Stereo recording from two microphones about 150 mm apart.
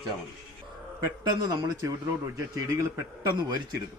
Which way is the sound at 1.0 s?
25° right (ahead or behind).